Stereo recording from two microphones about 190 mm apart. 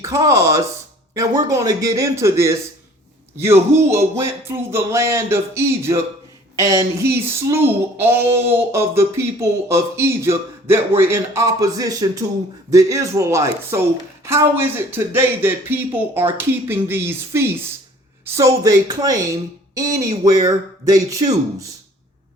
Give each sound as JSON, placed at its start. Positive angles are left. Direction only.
{"t": 0.0, "sound": "speech", "side_deg": -15}